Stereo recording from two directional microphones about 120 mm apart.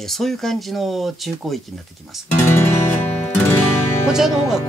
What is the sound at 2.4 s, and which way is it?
Music, 20° left (ahead or behind).